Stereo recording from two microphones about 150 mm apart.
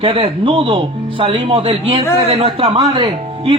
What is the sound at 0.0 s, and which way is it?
Speech, 35° right (ahead or behind).